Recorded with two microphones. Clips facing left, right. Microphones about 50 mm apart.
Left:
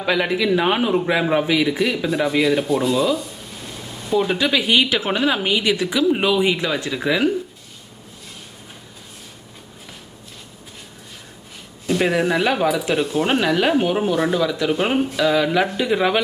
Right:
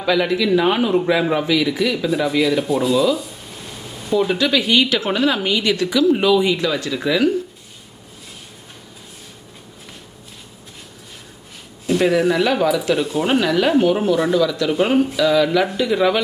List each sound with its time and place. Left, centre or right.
0.0 s speech: centre
2.0 s speech: centre
11.9 s speech: centre